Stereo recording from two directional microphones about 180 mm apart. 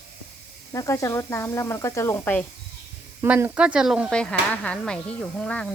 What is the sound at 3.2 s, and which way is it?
Speech, 10° right (ahead or behind).